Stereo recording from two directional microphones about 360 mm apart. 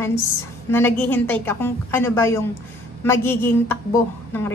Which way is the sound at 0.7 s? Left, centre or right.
Centre.